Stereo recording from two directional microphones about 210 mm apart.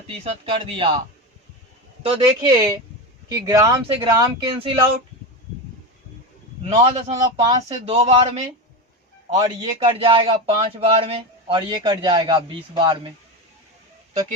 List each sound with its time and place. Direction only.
0.4 s a man's voice: 25° right (ahead or behind)
2.0 s a man's voice: 20° right (ahead or behind)
6.7 s a man's voice: 30° right (ahead or behind)